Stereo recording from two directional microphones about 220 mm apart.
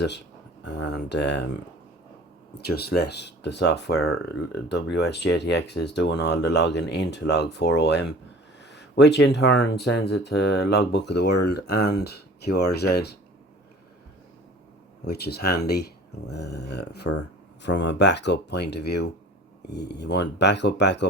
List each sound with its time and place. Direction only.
0.6 s speech: 50° left (ahead or behind)
2.6 s speech: 45° left (ahead or behind)
15.0 s speech: 45° left (ahead or behind)